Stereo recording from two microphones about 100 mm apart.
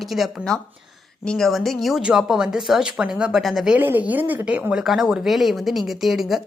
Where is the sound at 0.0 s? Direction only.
Centre (ahead or behind).